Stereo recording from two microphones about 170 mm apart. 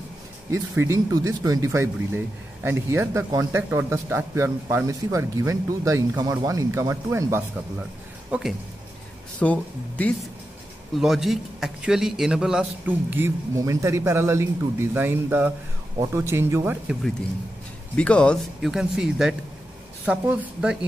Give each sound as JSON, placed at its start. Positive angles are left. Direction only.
{"t": 0.5, "sound": "speech", "side_deg": -15}
{"t": 8.3, "sound": "speech", "side_deg": 0}
{"t": 17.9, "sound": "speech", "side_deg": 5}